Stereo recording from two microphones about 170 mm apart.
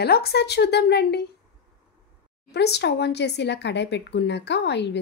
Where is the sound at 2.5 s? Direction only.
80° left.